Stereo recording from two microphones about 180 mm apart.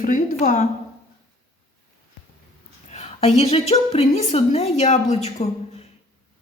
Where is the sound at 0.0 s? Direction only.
50° left (ahead or behind).